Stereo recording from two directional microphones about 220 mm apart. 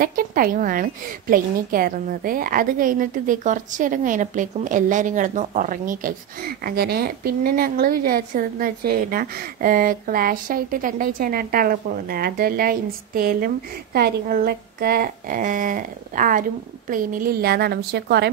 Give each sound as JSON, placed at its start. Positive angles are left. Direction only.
{"t": 0.0, "sound": "a woman's voice", "side_deg": -40}